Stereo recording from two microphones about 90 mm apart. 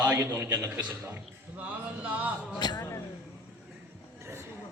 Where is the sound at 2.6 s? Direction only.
50° left (ahead or behind).